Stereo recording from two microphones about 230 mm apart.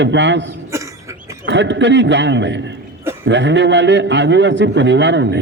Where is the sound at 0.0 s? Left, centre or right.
Right.